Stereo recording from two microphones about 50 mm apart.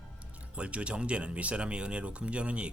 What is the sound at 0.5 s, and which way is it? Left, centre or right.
Speech, right.